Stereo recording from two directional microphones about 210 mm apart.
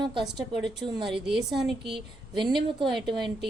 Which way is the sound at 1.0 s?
Centre (ahead or behind).